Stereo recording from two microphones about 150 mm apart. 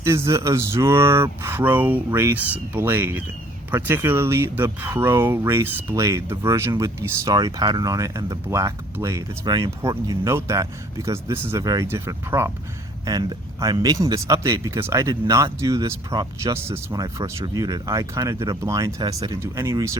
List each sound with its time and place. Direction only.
0.0 s speech: 20° right (ahead or behind)